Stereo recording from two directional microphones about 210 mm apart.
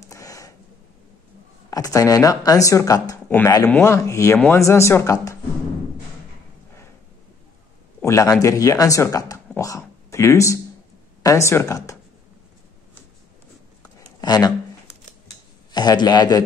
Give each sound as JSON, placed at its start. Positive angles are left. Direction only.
{"t": 0.1, "sound": "a sound", "side_deg": 15}
{"t": 1.7, "sound": "speech", "side_deg": 15}
{"t": 8.0, "sound": "speech", "side_deg": 15}
{"t": 9.6, "sound": "a sound", "side_deg": 15}
{"t": 11.2, "sound": "speech", "side_deg": 15}
{"t": 14.2, "sound": "speech", "side_deg": 20}
{"t": 15.7, "sound": "a man's voice", "side_deg": 20}